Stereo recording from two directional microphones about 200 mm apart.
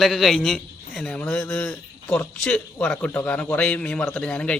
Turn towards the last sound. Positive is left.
turn(degrees=5)  # may be behind; listen again after turning